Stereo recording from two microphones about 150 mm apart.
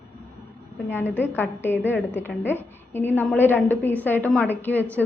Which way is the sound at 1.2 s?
15° left (ahead or behind).